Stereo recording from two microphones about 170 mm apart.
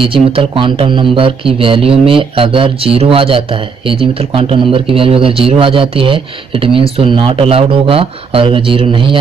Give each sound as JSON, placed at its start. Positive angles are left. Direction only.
{"t": 0.0, "sound": "speech", "side_deg": -30}